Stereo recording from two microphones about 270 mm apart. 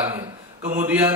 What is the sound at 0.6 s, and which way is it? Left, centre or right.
Speech, right.